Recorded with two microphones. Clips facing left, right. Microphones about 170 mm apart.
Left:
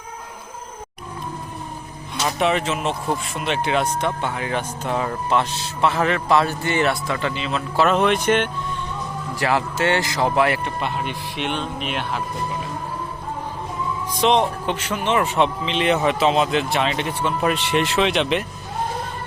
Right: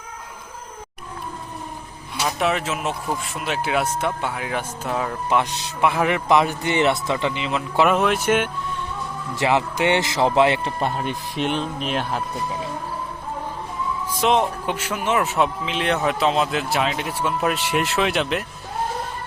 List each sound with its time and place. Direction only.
2.2 s speech: centre (ahead or behind)
5.4 s speech: 15° right (ahead or behind)
7.9 s speech: 5° right (ahead or behind)
9.3 s speech: 20° right (ahead or behind)
10.8 s music: 40° right (ahead or behind)
11.5 s speech: centre (ahead or behind)
14.2 s speech: 5° right (ahead or behind)